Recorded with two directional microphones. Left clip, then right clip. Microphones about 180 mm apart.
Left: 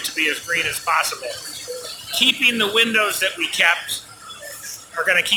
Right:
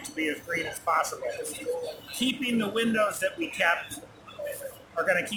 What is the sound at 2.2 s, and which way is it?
Speech, 5° left (ahead or behind).